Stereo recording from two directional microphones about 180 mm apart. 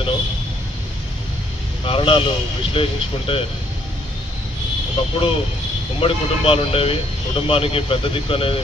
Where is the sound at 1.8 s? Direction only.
30° left (ahead or behind).